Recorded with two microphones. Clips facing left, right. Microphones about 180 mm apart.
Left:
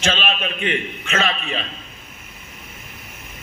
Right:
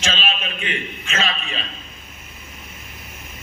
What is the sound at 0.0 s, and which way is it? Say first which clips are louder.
A man's voice: left 3 dB; 55° left (ahead or behind).